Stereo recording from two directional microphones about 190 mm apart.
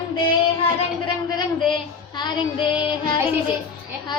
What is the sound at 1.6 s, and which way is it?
Child singing, 25° left (ahead or behind).